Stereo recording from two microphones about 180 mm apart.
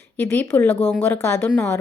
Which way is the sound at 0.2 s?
10° left (ahead or behind).